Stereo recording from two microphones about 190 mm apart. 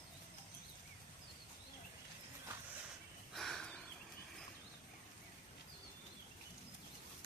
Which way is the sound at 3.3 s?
Centre (ahead or behind).